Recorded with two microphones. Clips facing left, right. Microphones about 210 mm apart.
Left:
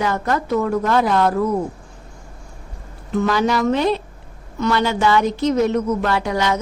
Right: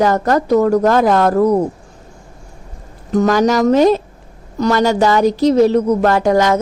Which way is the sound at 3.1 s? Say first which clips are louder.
Right 6 dB; 40° right (ahead or behind).